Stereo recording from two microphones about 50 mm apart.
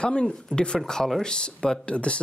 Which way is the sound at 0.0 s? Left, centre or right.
Centre.